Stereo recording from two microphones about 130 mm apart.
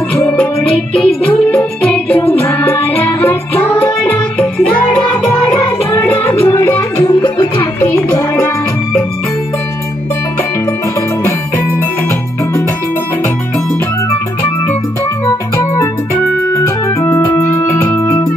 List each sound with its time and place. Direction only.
0.1 s music: 10° left (ahead or behind)
15.2 s music: 25° left (ahead or behind)
16.5 s organ: 20° left (ahead or behind)
17.6 s music: 25° left (ahead or behind)